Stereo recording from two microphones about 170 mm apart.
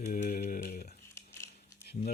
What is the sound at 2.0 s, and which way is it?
Speech, 40° left (ahead or behind).